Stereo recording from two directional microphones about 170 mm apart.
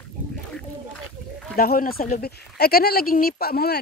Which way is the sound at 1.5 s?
60° left (ahead or behind).